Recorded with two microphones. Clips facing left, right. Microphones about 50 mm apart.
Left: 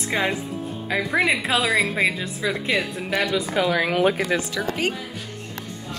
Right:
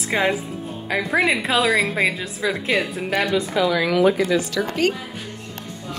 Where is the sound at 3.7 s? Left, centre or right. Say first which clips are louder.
Right 3 dB; left.